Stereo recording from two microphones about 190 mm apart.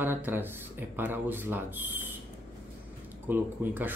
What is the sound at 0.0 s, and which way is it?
Speech, 10° right (ahead or behind).